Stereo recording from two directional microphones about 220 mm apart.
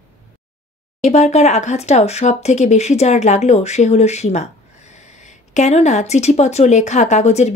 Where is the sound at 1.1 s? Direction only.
30° left (ahead or behind).